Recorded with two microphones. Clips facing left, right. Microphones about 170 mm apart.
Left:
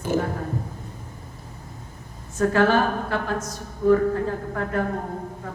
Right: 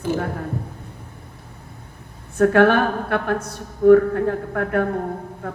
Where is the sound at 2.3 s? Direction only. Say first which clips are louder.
Right 4 dB; 60° right (ahead or behind).